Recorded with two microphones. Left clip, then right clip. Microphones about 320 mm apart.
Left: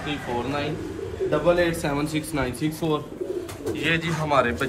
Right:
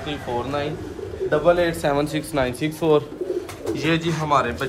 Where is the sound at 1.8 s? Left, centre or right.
Centre.